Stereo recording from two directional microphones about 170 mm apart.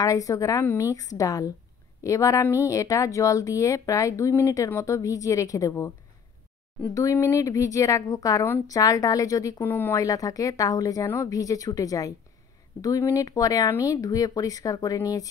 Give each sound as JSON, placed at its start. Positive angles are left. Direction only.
{"t": 0.0, "sound": "speech", "side_deg": 20}